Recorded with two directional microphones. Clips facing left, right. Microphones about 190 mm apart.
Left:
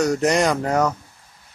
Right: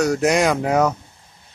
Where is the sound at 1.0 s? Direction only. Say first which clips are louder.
Right 1 dB; 25° right (ahead or behind).